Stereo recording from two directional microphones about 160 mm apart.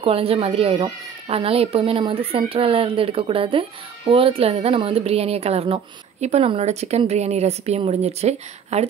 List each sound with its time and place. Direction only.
0.0 s speech: 35° right (ahead or behind)